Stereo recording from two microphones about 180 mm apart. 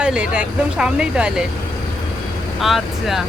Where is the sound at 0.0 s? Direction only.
5° right (ahead or behind).